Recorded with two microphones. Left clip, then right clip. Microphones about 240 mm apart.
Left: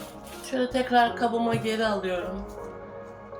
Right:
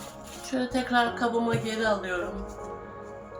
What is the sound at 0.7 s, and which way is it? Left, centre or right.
Speech, centre.